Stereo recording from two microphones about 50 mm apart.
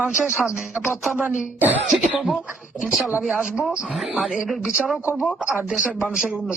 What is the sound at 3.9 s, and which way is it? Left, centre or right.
Speech, centre.